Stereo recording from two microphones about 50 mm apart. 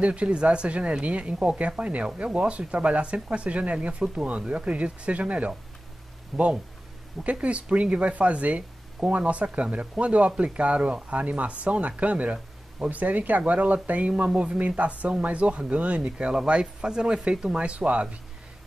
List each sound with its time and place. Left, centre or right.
0.0 s speech: right
6.3 s speech: centre
7.2 s speech: right